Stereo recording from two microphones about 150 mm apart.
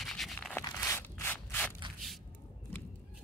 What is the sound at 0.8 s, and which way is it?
Rub, 15° left (ahead or behind).